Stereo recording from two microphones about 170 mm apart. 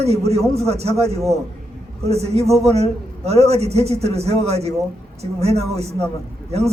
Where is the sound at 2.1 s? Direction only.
40° right (ahead or behind).